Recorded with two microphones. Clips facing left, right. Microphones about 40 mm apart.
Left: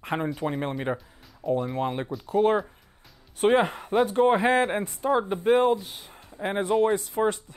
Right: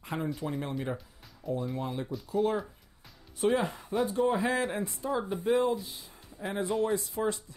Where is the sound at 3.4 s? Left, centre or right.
Left.